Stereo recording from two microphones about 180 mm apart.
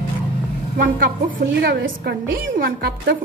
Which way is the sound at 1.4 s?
65° right (ahead or behind).